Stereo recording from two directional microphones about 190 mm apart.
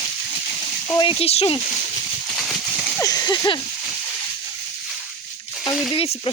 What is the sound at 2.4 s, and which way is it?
Horse, centre (ahead or behind).